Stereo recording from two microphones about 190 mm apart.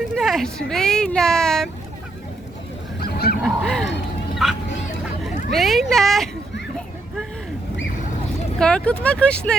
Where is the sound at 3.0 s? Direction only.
55° left (ahead or behind).